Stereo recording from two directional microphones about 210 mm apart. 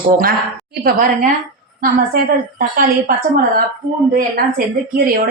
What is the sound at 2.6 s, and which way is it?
Speech, 45° right (ahead or behind).